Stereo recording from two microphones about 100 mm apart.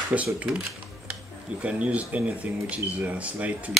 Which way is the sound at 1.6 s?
15° right (ahead or behind).